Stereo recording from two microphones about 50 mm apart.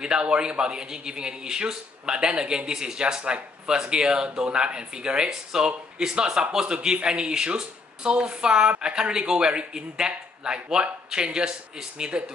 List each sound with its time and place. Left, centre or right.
0.0 s speech: centre